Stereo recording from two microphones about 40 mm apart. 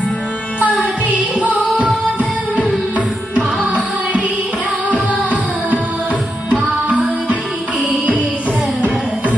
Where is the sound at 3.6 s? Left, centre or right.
Right.